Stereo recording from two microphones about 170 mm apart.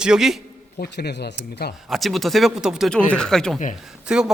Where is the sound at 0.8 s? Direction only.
80° left.